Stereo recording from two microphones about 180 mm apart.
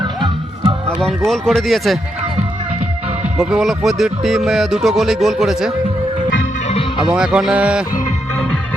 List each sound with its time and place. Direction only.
0.0 s music: 25° right (ahead or behind)
1.0 s speech: centre (ahead or behind)
3.3 s speech: centre (ahead or behind)
7.0 s speech: 5° right (ahead or behind)